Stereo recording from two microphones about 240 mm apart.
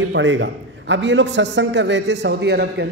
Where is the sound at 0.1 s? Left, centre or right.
Right.